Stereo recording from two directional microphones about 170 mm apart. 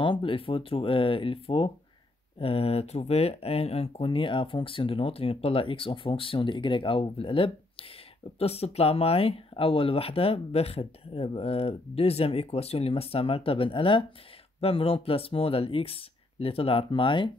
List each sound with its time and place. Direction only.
0.0 s speech: 30° left (ahead or behind)